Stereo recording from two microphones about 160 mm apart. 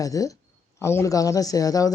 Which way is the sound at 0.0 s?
20° left (ahead or behind).